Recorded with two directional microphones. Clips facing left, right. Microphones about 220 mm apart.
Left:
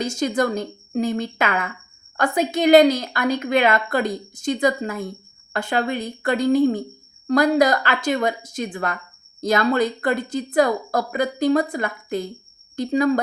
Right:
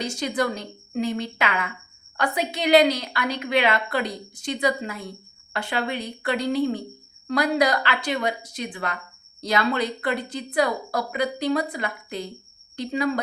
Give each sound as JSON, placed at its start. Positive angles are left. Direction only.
{"t": 0.0, "sound": "a woman's voice", "side_deg": 45}